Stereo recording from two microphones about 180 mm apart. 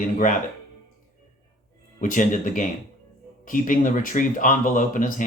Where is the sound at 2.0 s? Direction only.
45° left (ahead or behind).